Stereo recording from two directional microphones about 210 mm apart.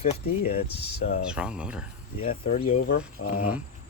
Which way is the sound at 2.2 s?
40° left (ahead or behind).